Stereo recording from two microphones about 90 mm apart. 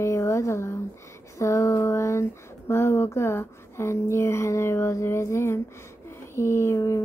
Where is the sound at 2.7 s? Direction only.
30° left (ahead or behind).